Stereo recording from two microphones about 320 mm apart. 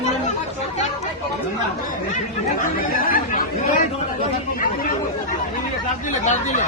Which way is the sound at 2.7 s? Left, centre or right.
Left.